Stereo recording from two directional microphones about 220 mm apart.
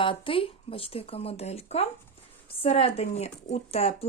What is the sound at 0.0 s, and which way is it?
Speech, 25° left (ahead or behind).